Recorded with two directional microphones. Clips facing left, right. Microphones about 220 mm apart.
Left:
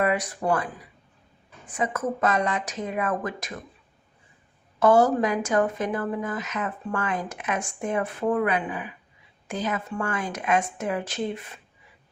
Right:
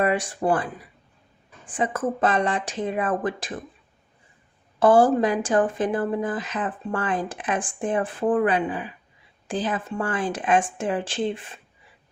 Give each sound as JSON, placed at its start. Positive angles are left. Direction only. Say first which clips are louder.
{"t": 0.0, "sound": "speech", "louder": "right 2 dB", "side_deg": -30}
{"t": 4.8, "sound": "speech", "louder": "right 2 dB", "side_deg": -30}